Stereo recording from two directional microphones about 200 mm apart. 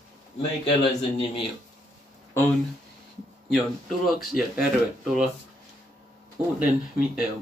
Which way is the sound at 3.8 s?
Centre (ahead or behind).